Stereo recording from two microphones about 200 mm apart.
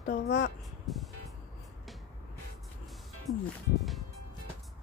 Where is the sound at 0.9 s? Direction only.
Centre (ahead or behind).